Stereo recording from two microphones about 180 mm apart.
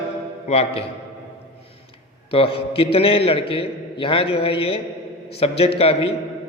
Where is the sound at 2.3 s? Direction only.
30° left (ahead or behind).